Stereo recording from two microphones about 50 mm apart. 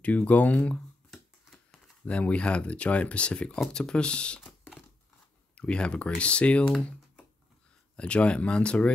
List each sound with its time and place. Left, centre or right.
0.0 s speech: left
2.0 s speech: left
5.6 s speech: left
7.9 s speech: left